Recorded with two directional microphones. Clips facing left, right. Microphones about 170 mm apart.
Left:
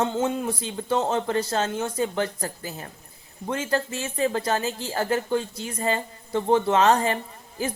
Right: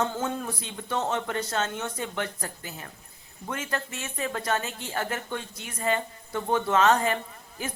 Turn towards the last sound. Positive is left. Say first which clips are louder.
# left 6 dB
turn(degrees=30)  # may be behind; listen again after turning